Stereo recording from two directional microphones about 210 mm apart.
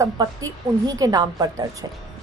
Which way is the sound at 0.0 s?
15° right (ahead or behind).